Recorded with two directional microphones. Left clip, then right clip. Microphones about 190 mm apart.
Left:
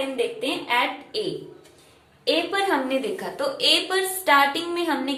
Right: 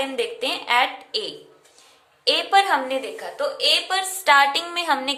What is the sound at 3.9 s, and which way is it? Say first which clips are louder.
A woman's voice: right 2 dB; 20° right (ahead or behind).